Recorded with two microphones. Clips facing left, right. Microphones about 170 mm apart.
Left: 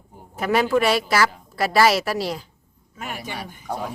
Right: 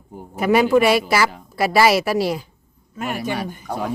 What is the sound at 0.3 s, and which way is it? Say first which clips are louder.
Speech: right 4 dB; 10° right (ahead or behind).